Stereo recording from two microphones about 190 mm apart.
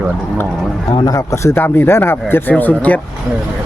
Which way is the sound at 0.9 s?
20° left (ahead or behind).